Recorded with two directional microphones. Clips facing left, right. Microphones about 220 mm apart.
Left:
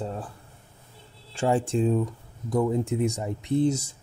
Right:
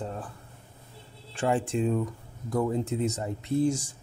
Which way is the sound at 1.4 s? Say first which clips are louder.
Left 3 dB; 30° left (ahead or behind).